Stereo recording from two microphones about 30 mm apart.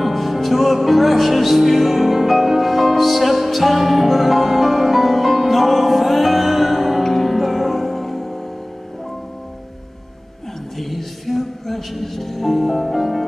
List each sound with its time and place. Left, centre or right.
0.0 s music: centre
7.0 s music: centre
10.8 s music: centre